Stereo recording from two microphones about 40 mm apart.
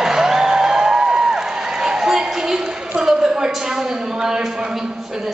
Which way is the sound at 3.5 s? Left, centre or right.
Centre.